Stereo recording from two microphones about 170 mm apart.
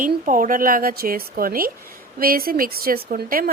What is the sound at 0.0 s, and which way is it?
Speech, 55° right (ahead or behind).